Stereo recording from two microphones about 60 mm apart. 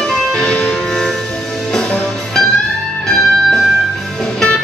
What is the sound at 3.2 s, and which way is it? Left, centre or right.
Music, centre.